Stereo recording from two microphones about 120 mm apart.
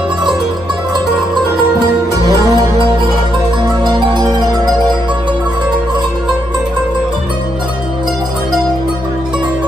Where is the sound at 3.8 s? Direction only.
40° right (ahead or behind).